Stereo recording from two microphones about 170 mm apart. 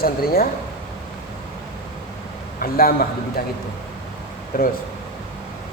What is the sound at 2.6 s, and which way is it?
Speech, 60° left (ahead or behind).